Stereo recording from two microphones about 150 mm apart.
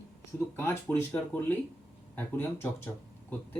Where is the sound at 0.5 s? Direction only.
15° left (ahead or behind).